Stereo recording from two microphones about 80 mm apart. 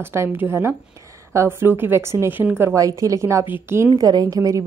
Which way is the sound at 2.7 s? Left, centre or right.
Right.